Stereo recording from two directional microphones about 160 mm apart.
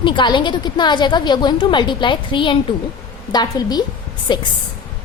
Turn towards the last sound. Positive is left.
turn(degrees=30)  # may be behind; listen again after turning